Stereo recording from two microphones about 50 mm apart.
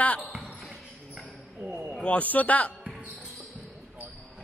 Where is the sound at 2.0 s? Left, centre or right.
Left.